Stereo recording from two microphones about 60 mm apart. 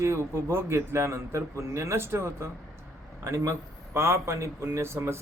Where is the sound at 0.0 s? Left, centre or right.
Right.